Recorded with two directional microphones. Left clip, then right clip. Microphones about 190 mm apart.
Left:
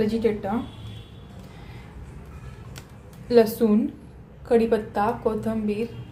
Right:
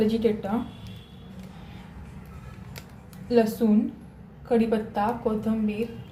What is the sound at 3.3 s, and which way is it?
A woman's voice, 30° left (ahead or behind).